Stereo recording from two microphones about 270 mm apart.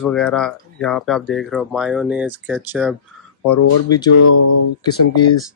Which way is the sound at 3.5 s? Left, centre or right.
Left.